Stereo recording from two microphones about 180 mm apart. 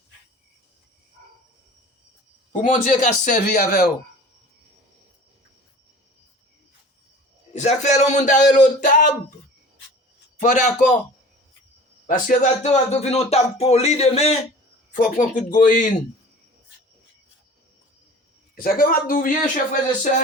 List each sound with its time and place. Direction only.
2.5 s a man's voice: 45° left (ahead or behind)
7.5 s speech: 40° left (ahead or behind)
10.4 s a man's voice: 45° left (ahead or behind)
12.0 s a man's voice: 45° left (ahead or behind)
18.5 s a man's voice: 55° left (ahead or behind)